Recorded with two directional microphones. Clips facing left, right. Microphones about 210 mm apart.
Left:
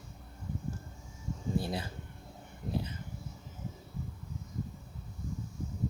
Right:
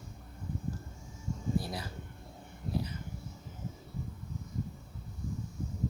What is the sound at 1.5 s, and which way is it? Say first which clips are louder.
Speech: left 3 dB; 25° left (ahead or behind).